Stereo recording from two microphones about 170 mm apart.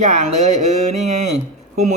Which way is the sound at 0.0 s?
45° right (ahead or behind).